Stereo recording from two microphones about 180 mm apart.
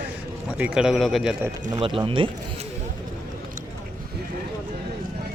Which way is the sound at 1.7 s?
30° right (ahead or behind).